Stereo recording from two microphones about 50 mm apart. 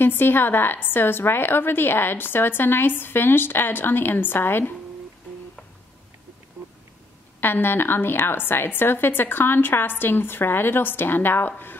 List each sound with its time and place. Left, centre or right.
0.0 s a woman's voice: left
7.3 s a woman's voice: left